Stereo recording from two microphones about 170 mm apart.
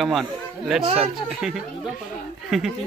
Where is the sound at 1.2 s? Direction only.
5° right (ahead or behind).